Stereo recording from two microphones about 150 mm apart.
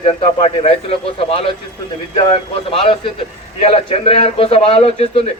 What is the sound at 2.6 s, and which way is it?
A man's voice, 35° left (ahead or behind).